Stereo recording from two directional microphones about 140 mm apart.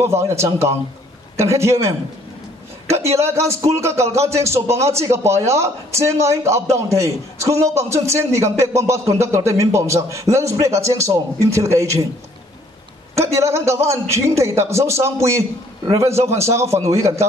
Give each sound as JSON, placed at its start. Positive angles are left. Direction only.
{"t": 0.0, "sound": "speech", "side_deg": -20}
{"t": 13.1, "sound": "speech", "side_deg": -20}